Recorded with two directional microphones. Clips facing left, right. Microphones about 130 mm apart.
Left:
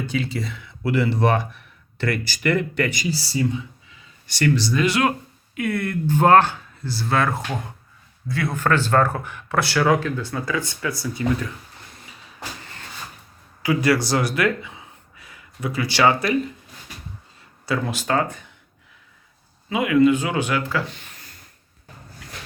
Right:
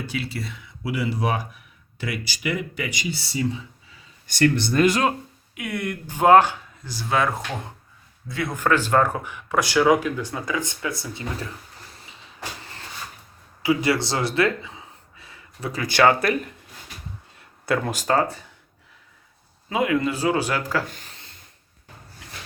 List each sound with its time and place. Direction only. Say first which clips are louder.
0.0 s speech: left 4 dB; 5° right (ahead or behind)
3.1 s speech: left 3 dB; 30° left (ahead or behind)
4.3 s speech: even; 50° right (ahead or behind)
5.5 s speech: left 5 dB; 20° right (ahead or behind)
8.3 s speech: left 1 dB; 20° right (ahead or behind)
13.6 s speech: left 1 dB; 25° right (ahead or behind); by 16.6 s 55° right (ahead or behind)
17.3 s a sound: right 1 dB; 50° right (ahead or behind)
18.1 s speech: right 1 dB; 35° right (ahead or behind)
19.7 s speech: left 5 dB; 35° right (ahead or behind)